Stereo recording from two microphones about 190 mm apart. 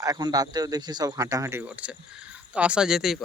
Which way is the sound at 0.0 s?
20° right (ahead or behind).